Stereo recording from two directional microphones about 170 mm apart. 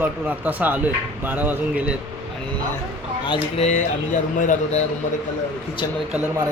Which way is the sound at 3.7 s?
45° left (ahead or behind).